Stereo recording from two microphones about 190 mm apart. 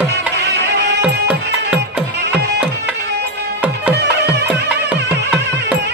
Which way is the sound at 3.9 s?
60° right (ahead or behind).